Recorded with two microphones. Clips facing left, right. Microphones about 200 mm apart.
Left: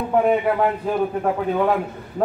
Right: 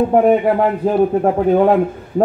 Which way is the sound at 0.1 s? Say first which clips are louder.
Right 6 dB; 40° right (ahead or behind).